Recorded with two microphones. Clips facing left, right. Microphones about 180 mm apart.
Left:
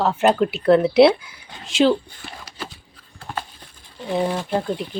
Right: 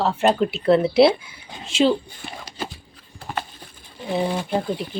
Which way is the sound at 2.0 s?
20° right (ahead or behind).